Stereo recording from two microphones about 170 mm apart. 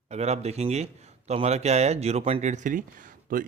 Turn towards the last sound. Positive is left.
turn(degrees=-55)  # may be behind; listen again after turning